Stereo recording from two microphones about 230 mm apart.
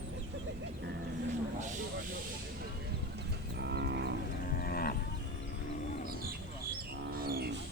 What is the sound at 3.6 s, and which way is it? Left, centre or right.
Moo, right.